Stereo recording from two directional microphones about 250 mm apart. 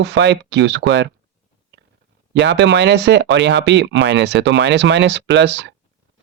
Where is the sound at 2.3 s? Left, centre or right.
Right.